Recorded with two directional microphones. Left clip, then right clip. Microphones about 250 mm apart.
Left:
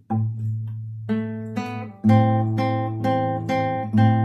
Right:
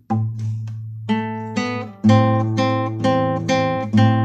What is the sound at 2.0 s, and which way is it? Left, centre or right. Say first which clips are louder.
Music: right 3 dB; right.